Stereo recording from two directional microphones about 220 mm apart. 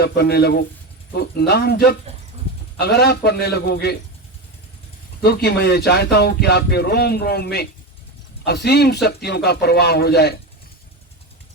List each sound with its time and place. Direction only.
0.0 s speech: 45° left (ahead or behind)
5.2 s speech: 45° left (ahead or behind)